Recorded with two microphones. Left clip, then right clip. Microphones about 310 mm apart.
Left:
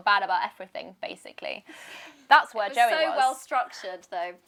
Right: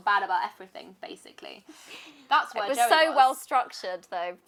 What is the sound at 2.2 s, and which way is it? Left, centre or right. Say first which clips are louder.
Speech: left 5 dB; left.